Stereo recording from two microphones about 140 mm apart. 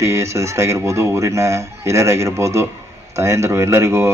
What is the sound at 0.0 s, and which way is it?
Speech, 20° right (ahead or behind).